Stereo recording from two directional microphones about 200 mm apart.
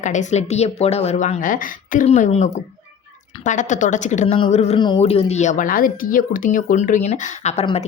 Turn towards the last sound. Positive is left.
turn(degrees=30)  # may be behind; listen again after turning